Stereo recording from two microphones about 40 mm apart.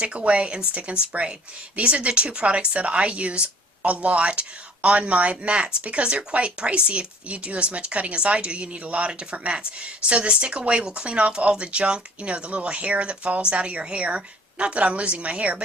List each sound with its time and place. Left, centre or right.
0.0 s speech: right